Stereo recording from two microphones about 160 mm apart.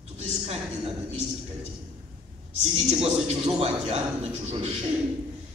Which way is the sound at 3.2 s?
40° right (ahead or behind).